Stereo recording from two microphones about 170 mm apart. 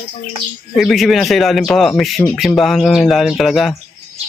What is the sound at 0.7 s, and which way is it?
Speech, centre (ahead or behind).